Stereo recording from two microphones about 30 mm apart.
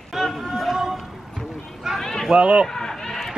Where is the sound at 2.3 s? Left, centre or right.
Right.